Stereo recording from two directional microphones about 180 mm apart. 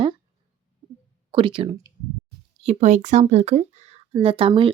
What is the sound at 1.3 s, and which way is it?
Speech, 30° right (ahead or behind).